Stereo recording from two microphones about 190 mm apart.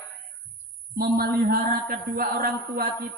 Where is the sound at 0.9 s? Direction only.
55° right (ahead or behind).